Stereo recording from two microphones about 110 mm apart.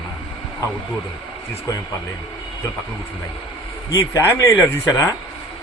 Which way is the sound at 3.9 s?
30° left (ahead or behind).